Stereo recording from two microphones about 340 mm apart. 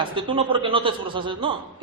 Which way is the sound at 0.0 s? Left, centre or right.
Centre.